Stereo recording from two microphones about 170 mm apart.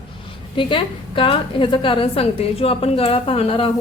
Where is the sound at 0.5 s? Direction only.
30° left (ahead or behind).